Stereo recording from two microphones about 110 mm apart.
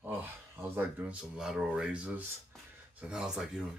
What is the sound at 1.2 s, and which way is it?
Speech, 5° right (ahead or behind).